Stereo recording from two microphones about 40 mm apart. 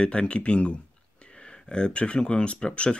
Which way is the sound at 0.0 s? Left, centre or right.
Left.